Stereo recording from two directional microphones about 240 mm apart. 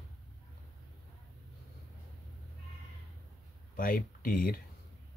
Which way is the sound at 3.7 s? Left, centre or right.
Left.